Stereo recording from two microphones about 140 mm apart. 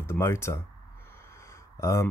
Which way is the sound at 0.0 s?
20° left (ahead or behind).